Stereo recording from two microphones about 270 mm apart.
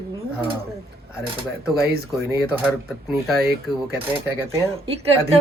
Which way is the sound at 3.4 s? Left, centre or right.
Right.